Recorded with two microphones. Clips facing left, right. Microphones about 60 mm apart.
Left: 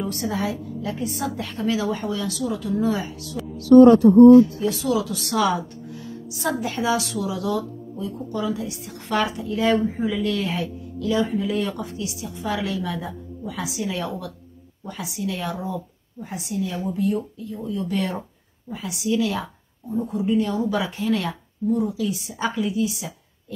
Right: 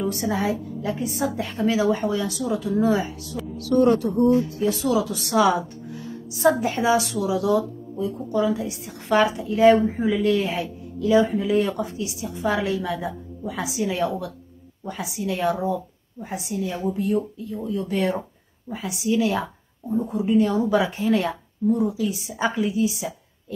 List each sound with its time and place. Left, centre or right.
0.1 s a woman's voice: centre
1.6 s a woman's voice: right
3.6 s speech: left
4.6 s a woman's voice: right